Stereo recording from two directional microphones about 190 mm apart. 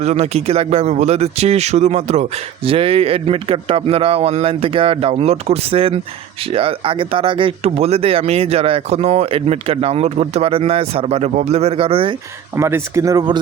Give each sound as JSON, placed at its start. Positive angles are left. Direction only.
{"t": 0.0, "sound": "speech", "side_deg": -35}
{"t": 12.5, "sound": "speech", "side_deg": -15}